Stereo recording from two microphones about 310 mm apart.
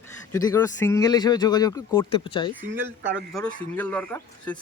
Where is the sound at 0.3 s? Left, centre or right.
Centre.